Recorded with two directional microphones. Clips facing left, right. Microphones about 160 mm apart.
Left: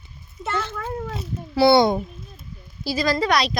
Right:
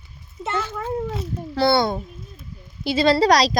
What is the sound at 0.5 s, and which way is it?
Speech, 10° right (ahead or behind).